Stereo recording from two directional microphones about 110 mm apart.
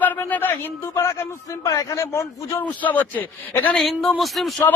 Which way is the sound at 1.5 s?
30° left (ahead or behind).